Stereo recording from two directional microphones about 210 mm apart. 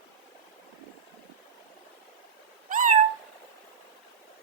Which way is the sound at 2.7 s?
40° right (ahead or behind).